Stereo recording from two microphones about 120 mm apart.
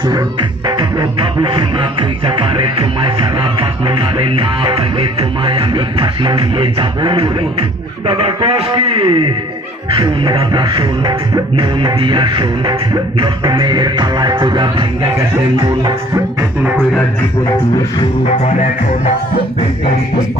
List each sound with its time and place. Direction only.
0.1 s music: 40° right (ahead or behind)